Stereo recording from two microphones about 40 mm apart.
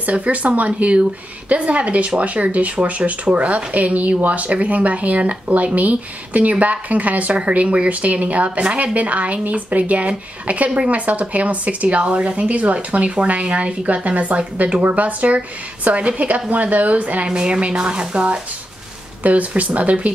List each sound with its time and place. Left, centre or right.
0.0 s a woman's voice: right
17.3 s speech: right
19.2 s a woman's voice: right